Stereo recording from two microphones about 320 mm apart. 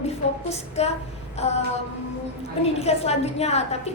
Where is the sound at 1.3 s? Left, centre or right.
Centre.